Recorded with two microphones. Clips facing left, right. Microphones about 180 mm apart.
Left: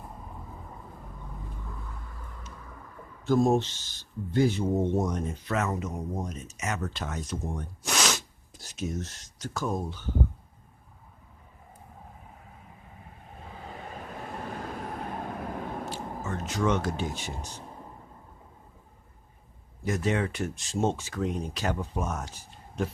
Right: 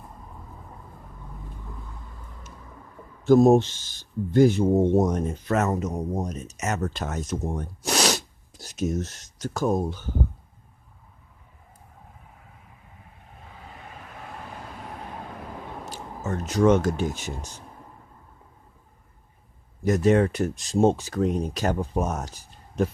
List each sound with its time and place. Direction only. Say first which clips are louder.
3.2 s speech: right 7 dB; 45° right (ahead or behind)
15.9 s speech: right 2 dB; 40° right (ahead or behind)
19.8 s speech: right 8 dB; 45° right (ahead or behind)